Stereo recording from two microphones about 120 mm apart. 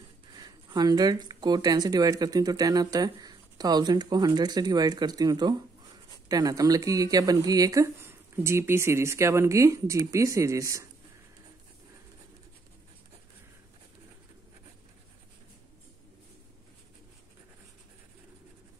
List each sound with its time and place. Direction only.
0.3 s speech: 35° right (ahead or behind)